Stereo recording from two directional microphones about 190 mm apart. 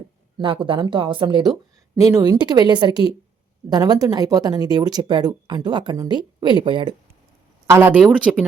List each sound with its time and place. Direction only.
0.3 s speech: 25° right (ahead or behind)
7.7 s speech: 10° right (ahead or behind)